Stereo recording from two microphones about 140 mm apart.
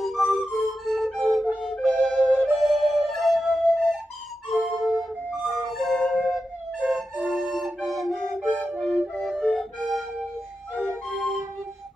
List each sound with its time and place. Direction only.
0.0 s music: centre (ahead or behind)
1.6 s flute: centre (ahead or behind)
10.7 s music: centre (ahead or behind)